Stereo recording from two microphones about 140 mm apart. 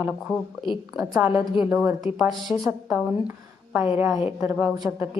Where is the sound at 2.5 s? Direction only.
15° right (ahead or behind).